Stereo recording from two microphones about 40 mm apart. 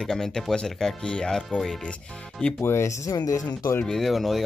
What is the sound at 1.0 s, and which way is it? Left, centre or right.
Speech, left.